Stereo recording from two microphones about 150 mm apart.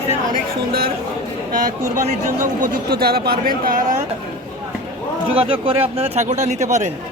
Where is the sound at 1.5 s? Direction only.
70° right (ahead or behind).